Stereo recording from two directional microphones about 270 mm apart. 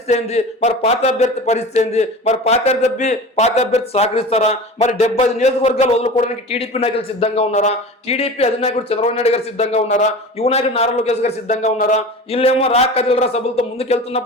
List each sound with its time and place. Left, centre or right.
0.1 s speech: left